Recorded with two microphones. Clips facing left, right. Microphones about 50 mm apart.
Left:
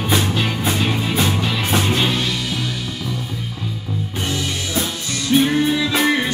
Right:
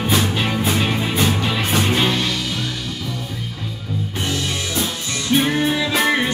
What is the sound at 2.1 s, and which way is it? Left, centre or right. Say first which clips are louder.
Music: right 1 dB; centre.